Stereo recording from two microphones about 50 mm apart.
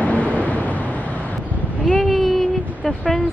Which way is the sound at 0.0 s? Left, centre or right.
Left.